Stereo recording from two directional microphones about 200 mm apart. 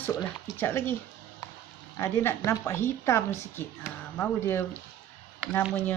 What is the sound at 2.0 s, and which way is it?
A woman's voice, 10° left (ahead or behind).